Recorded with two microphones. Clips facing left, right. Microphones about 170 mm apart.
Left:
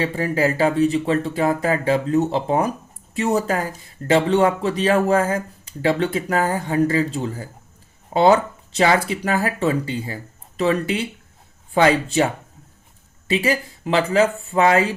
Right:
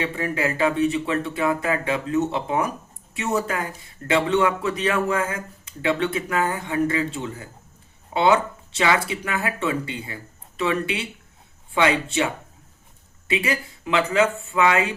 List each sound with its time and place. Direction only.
0.0 s speech: 35° left (ahead or behind)